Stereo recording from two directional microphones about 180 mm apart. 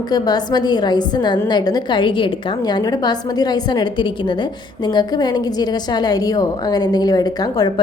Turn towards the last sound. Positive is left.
turn(degrees=20)  # may be behind; listen again after turning